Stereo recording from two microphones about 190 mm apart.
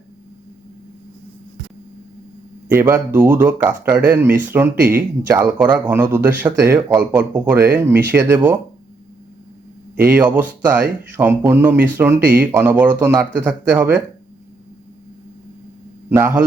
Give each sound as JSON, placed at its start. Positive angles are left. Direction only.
{"t": 2.6, "sound": "speech", "side_deg": -15}
{"t": 10.1, "sound": "speech", "side_deg": -10}
{"t": 16.0, "sound": "a man's voice", "side_deg": -10}